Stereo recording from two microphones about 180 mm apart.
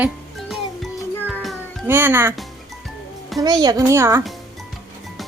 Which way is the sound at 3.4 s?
20° right (ahead or behind).